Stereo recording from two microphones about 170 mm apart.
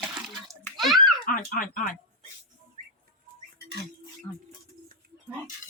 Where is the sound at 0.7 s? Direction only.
Centre (ahead or behind).